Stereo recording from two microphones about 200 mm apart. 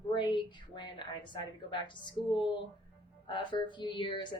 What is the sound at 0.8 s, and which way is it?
A woman's voice, 25° left (ahead or behind).